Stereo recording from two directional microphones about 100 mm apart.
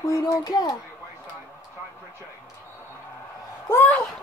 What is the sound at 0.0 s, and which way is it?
Speech, 35° left (ahead or behind).